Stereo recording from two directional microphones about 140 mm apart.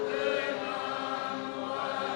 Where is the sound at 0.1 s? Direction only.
15° left (ahead or behind).